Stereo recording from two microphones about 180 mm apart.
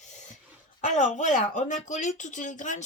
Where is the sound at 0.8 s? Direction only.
45° left (ahead or behind).